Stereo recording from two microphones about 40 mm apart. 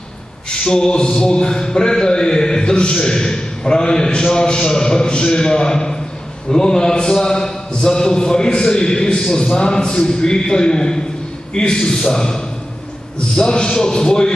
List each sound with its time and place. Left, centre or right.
0.5 s a man's voice: centre